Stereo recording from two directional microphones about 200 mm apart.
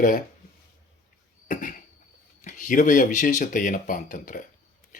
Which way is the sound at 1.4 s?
40° left (ahead or behind).